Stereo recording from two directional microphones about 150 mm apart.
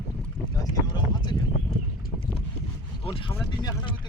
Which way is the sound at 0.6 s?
30° left (ahead or behind).